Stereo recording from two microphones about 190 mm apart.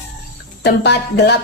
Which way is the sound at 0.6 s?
60° left (ahead or behind).